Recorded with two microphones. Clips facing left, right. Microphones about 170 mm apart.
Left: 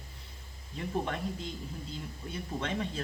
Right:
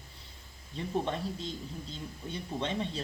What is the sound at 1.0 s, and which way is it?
Speech, 30° right (ahead or behind).